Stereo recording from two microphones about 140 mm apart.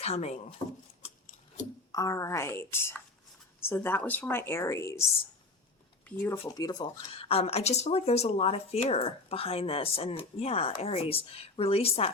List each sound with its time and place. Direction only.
0.0 s speech: 50° left (ahead or behind)
1.9 s a woman's voice: 25° left (ahead or behind)
6.1 s speech: 15° left (ahead or behind)
6.5 s a woman's voice: 30° left (ahead or behind)
7.1 s speech: 45° left (ahead or behind)